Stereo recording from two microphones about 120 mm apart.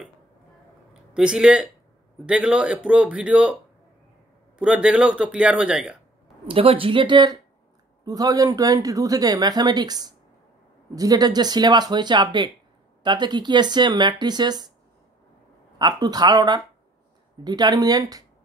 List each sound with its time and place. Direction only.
1.1 s speech: 5° right (ahead or behind)
4.6 s speech: 10° right (ahead or behind)
6.4 s speech: 50° right (ahead or behind); by 14.7 s 35° right (ahead or behind)
15.8 s speech: 35° right (ahead or behind)